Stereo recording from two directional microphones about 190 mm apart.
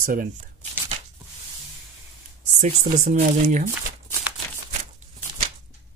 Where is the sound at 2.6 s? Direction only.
40° right (ahead or behind).